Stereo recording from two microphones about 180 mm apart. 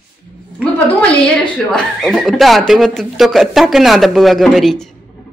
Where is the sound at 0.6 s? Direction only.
5° left (ahead or behind).